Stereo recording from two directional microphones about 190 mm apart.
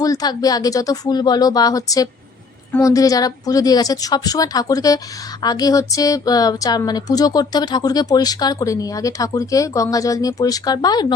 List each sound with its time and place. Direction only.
0.0 s speech: 20° left (ahead or behind)